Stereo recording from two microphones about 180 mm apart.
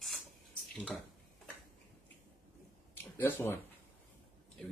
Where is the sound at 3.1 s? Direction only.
10° left (ahead or behind).